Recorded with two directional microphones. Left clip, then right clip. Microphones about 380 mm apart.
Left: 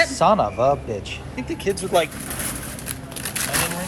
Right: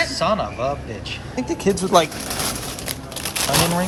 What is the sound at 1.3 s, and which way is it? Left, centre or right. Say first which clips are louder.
Speech: right 4 dB; right.